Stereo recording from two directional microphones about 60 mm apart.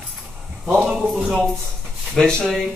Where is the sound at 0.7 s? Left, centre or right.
Right.